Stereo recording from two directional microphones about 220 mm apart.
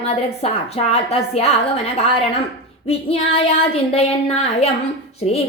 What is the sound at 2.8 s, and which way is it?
A woman's voice, 25° left (ahead or behind).